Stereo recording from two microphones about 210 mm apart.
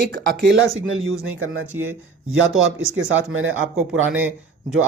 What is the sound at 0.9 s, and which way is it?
Speech, 70° right (ahead or behind).